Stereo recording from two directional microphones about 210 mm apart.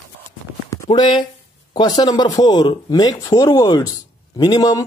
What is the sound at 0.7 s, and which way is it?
A man's voice, 15° left (ahead or behind).